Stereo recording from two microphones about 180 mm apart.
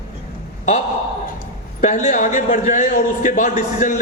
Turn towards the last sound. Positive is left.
turn(degrees=45)  # may be behind; listen again after turning